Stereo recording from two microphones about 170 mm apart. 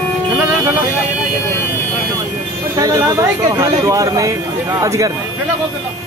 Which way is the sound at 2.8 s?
20° right (ahead or behind).